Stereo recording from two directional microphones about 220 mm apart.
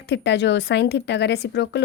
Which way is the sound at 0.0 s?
55° left (ahead or behind).